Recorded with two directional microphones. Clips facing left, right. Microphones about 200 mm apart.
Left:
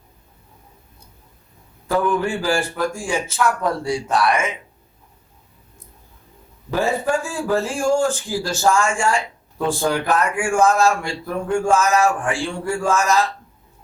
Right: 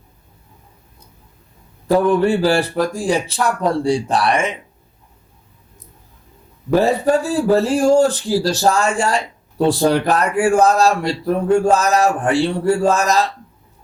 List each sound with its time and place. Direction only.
1.9 s speech: 35° right (ahead or behind)
6.7 s speech: 35° right (ahead or behind)